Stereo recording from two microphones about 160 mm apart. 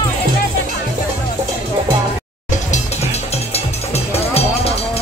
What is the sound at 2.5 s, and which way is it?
Music, 45° left (ahead or behind).